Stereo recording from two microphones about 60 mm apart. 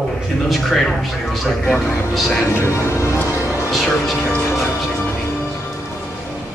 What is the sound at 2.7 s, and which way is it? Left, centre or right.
Music, left.